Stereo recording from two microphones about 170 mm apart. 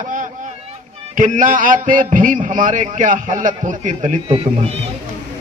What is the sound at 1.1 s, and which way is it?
A man's voice, 50° right (ahead or behind).